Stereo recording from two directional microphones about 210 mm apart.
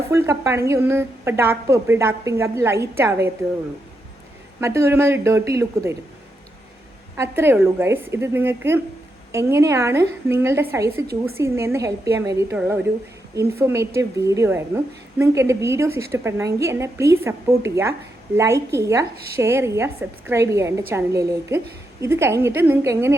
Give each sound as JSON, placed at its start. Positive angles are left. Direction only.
{"t": 0.1, "sound": "a woman's voice", "side_deg": -15}
{"t": 4.6, "sound": "a woman's voice", "side_deg": -15}
{"t": 7.2, "sound": "a woman's voice", "side_deg": -10}